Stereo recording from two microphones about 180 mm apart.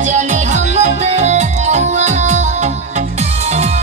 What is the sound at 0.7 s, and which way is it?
Music, 40° right (ahead or behind).